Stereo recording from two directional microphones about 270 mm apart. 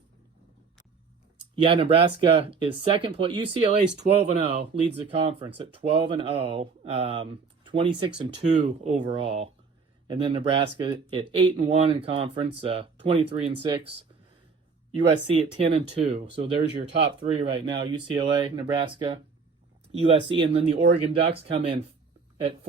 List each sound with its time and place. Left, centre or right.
1.5 s speech: right
15.1 s speech: right